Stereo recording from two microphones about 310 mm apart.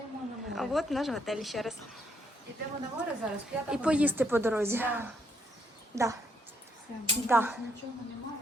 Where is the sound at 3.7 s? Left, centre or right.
Centre.